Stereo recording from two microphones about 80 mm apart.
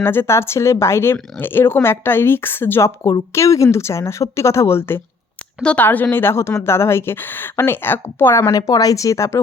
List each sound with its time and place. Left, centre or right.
0.0 s speech: left
8.4 s speech: left